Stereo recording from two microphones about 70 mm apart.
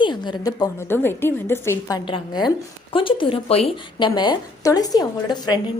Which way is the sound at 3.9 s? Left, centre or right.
Left.